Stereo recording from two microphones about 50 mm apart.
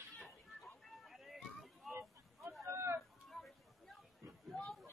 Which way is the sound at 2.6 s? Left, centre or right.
Right.